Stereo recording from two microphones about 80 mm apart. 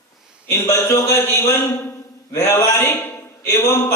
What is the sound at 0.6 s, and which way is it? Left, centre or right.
A man's voice, left.